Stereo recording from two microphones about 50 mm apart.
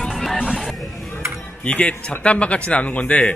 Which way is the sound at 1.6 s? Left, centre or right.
Left.